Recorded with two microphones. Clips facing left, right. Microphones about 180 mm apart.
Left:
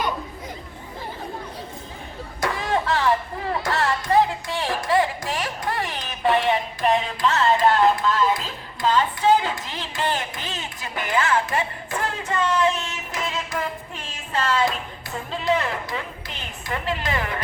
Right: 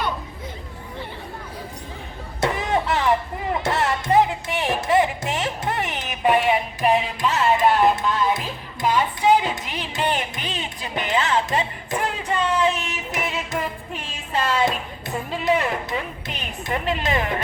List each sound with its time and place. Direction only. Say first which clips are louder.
2.4 s music: right 2 dB; 20° right (ahead or behind)